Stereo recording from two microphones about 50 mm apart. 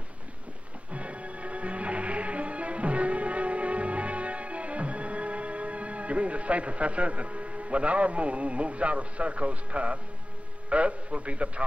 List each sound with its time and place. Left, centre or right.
0.9 s music: right
10.7 s a man's voice: right